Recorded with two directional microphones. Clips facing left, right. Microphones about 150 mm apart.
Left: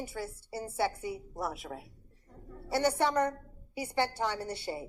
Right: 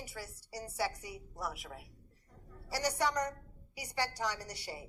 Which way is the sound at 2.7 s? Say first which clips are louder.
Left 6 dB; 25° left (ahead or behind).